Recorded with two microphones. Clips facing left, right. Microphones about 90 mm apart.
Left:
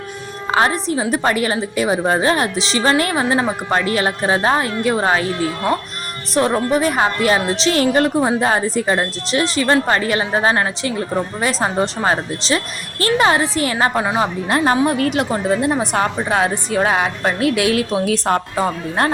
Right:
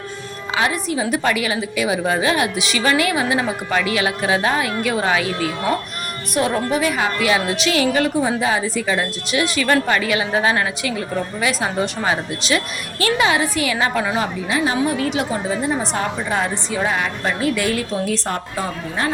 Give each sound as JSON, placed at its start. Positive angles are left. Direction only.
{"t": 0.5, "sound": "a woman's voice", "side_deg": 40}
{"t": 14.0, "sound": "speech", "side_deg": 25}
{"t": 14.5, "sound": "a woman's voice", "side_deg": 45}